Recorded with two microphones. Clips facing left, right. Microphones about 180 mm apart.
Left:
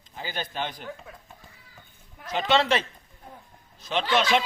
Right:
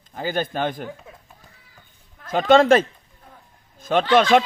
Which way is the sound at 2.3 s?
50° right (ahead or behind).